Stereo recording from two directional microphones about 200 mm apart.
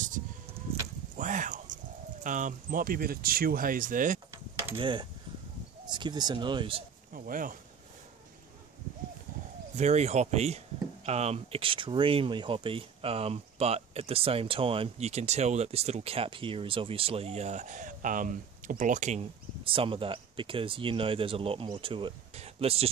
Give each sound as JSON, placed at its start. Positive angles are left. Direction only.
{"t": 1.1, "sound": "a sound", "side_deg": -40}
{"t": 2.2, "sound": "speech", "side_deg": -40}
{"t": 4.7, "sound": "speech", "side_deg": -25}
{"t": 7.2, "sound": "speech", "side_deg": -45}
{"t": 9.8, "sound": "speech", "side_deg": -35}